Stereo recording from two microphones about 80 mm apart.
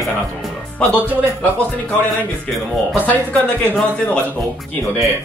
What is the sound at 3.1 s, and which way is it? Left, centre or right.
Speech, left.